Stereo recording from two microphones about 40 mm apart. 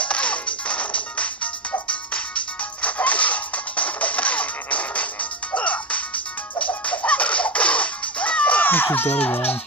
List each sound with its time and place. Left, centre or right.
0.0 s music: left
8.6 s speech: left